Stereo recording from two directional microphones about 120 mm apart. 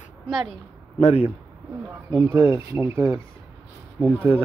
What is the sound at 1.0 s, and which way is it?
Speech, 65° left (ahead or behind).